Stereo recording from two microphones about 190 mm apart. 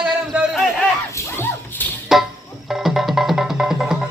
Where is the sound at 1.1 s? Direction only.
10° left (ahead or behind).